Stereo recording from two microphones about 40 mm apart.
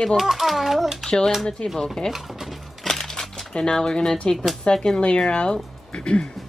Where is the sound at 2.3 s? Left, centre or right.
Centre.